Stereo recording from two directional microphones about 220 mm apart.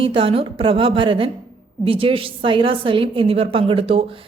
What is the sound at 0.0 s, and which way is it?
A woman's voice, 25° right (ahead or behind).